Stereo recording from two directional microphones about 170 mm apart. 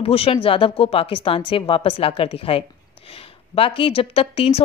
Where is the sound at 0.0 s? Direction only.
35° left (ahead or behind).